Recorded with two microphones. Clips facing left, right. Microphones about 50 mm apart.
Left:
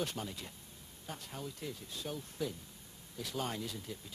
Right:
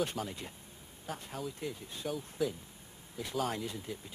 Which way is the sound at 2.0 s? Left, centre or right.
Centre.